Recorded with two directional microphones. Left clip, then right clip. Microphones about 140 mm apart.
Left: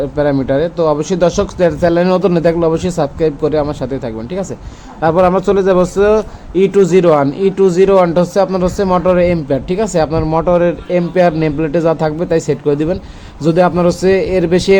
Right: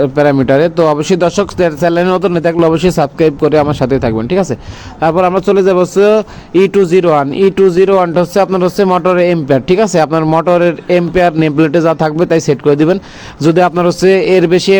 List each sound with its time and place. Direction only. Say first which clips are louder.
0.0 s a man's voice: right 5 dB; 45° right (ahead or behind)
4.9 s a man's voice: right 1 dB; 50° right (ahead or behind)